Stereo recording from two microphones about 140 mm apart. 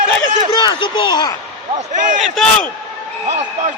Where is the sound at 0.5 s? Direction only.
35° left (ahead or behind).